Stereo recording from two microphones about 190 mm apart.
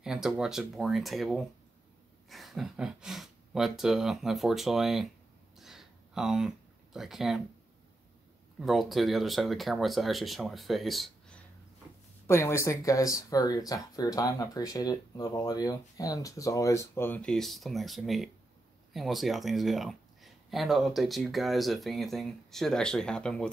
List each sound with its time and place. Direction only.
0.0 s speech: 5° right (ahead or behind)
5.6 s a sound: centre (ahead or behind)
8.5 s speech: centre (ahead or behind)
12.3 s speech: 15° left (ahead or behind)